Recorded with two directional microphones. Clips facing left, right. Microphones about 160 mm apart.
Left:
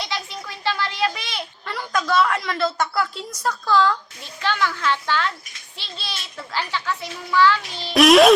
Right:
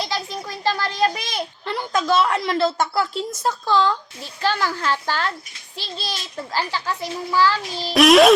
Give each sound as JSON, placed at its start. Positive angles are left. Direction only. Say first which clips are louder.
{"t": 0.6, "sound": "a sound", "louder": "right 3 dB", "side_deg": -40}
{"t": 1.6, "sound": "a woman's voice", "louder": "right 2 dB", "side_deg": -25}
{"t": 4.4, "sound": "a child's voice", "louder": "right 1 dB", "side_deg": -35}
{"t": 7.9, "sound": "a child's voice", "louder": "even", "side_deg": 0}